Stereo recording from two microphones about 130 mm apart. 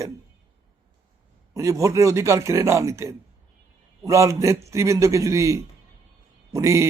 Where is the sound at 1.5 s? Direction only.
25° right (ahead or behind).